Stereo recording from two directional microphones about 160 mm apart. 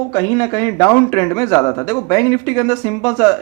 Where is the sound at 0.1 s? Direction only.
20° left (ahead or behind).